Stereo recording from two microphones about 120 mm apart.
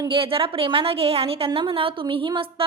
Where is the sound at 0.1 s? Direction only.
50° right (ahead or behind).